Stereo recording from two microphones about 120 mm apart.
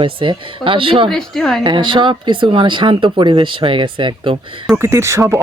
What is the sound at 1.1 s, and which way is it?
Speech, 5° left (ahead or behind).